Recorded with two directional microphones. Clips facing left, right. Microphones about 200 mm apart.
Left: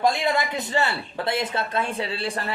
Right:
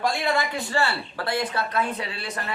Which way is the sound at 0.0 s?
20° left (ahead or behind).